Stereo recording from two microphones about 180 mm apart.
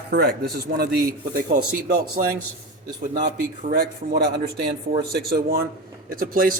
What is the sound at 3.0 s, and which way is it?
A man's voice, 45° right (ahead or behind).